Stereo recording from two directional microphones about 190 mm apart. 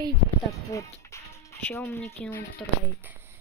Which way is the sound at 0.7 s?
15° left (ahead or behind).